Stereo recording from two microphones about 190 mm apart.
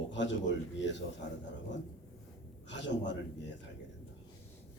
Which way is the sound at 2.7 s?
70° left (ahead or behind).